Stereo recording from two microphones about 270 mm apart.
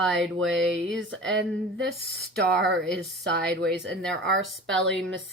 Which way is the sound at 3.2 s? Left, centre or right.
Right.